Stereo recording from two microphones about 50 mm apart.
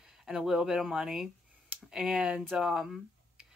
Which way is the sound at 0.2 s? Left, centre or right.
Centre.